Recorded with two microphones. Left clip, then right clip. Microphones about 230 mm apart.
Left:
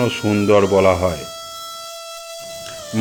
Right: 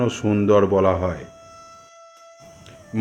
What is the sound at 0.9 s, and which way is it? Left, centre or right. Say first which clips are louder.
Speech: left 5 dB; left.